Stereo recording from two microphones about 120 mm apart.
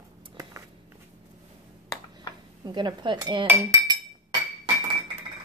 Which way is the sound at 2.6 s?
35° right (ahead or behind).